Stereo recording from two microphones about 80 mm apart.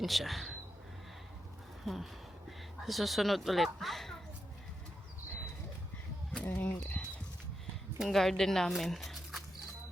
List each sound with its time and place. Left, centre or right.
0.0 s speech: centre
1.8 s a sound: centre
2.8 s speech: centre
6.4 s speech: left
7.9 s speech: centre